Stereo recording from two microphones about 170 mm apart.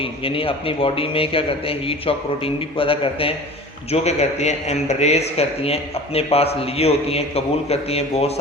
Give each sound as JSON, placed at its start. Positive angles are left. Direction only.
{"t": 0.0, "sound": "a man's voice", "side_deg": 30}